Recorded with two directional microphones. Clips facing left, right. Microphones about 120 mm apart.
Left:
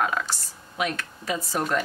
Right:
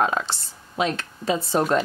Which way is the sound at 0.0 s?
30° right (ahead or behind).